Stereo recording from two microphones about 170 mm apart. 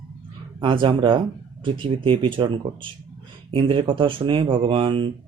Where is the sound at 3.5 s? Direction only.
30° right (ahead or behind).